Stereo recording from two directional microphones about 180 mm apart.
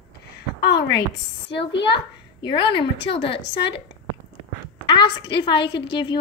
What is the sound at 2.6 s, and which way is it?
Speech, 25° left (ahead or behind).